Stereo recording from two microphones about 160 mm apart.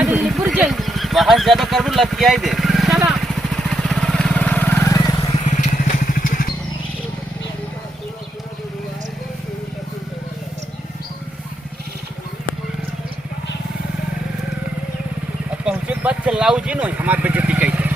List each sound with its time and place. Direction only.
0.0 s vehicle: 5° right (ahead or behind); by 5.3 s 25° left (ahead or behind)
5.3 s vehicle: 50° left (ahead or behind)
15.6 s vehicle: 10° right (ahead or behind)